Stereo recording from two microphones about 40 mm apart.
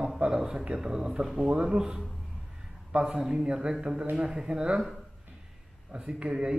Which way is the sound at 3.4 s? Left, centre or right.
Right.